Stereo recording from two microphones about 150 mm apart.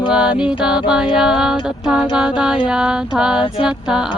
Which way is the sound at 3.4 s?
35° left (ahead or behind).